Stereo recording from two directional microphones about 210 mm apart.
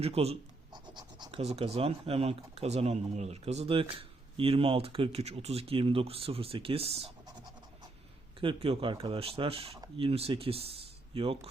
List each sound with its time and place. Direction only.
0.0 s speech: 30° right (ahead or behind)
7.0 s scratch: 20° right (ahead or behind)
8.4 s speech: 25° right (ahead or behind)